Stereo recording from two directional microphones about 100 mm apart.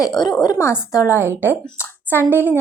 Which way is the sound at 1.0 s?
20° right (ahead or behind).